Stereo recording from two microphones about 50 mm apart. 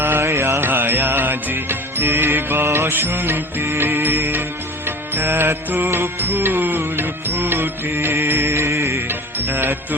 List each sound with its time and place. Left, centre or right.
0.0 s music: right
9.0 s music: right